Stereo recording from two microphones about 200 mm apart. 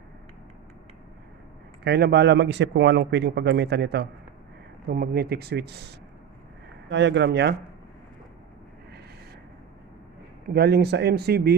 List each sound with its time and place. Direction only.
1.8 s a man's voice: 55° right (ahead or behind)
6.8 s a man's voice: 65° right (ahead or behind)
10.5 s speech: 55° right (ahead or behind)